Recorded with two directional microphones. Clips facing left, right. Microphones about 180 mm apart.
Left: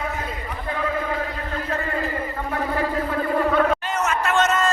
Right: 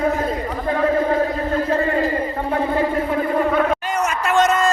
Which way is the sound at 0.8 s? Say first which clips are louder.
Right 8 dB; 40° right (ahead or behind).